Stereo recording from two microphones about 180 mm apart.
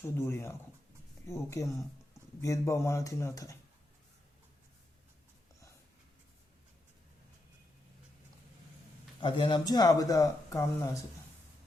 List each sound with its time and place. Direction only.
0.0 s speech: 15° left (ahead or behind)
9.2 s speech: 25° left (ahead or behind)